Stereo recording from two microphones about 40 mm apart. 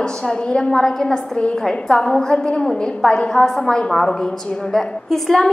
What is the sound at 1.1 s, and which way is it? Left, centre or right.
Speech, left.